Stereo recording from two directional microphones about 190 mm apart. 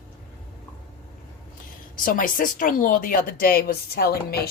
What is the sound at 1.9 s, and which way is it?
Speech, 45° left (ahead or behind).